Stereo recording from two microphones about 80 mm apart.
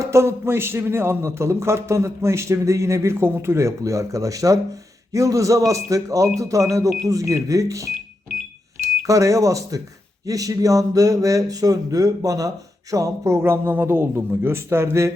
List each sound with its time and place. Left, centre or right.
0.0 s speech: right
9.0 s speech: right